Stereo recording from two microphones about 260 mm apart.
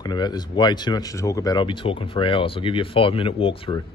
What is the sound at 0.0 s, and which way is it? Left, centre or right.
Speech, centre.